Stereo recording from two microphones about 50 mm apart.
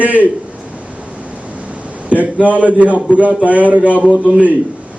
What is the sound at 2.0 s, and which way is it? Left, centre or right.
A man's voice, right.